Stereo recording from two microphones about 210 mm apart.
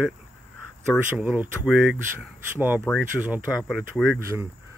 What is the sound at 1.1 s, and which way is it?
Speech, 10° right (ahead or behind).